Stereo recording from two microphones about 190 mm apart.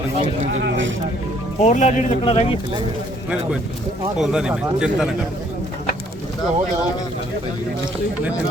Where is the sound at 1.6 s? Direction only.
40° left (ahead or behind).